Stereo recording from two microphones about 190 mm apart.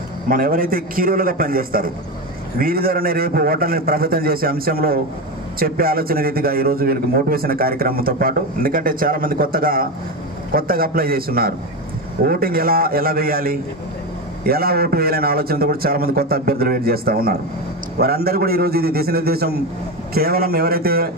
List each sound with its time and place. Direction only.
0.3 s a man's voice: 50° right (ahead or behind)